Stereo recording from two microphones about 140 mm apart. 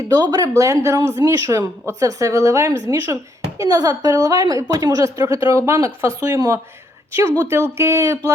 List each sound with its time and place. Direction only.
0.1 s a woman's voice: 25° right (ahead or behind)